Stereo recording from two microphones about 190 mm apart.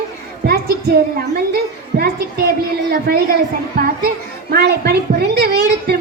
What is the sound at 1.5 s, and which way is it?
A child's voice, 55° right (ahead or behind).